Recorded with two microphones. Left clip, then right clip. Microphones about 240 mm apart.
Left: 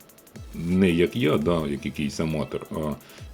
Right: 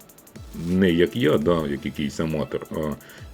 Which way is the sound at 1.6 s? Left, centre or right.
Left.